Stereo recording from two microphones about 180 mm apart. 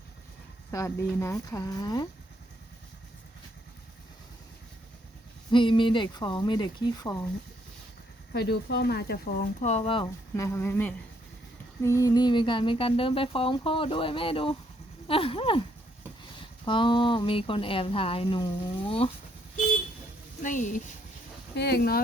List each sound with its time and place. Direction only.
0.7 s speech: 15° left (ahead or behind)
5.5 s speech: 25° left (ahead or behind)
8.3 s speech: 65° left (ahead or behind)
9.6 s speech: 40° left (ahead or behind)
10.3 s speech: 15° left (ahead or behind); by 19.1 s 30° left (ahead or behind)
20.4 s speech: 45° left (ahead or behind)
21.5 s speech: 65° left (ahead or behind)